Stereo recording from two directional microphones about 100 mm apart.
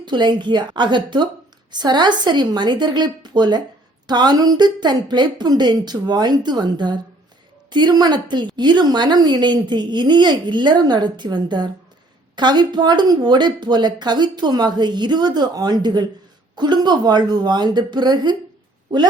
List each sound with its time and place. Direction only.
0.0 s a woman's voice: 50° right (ahead or behind)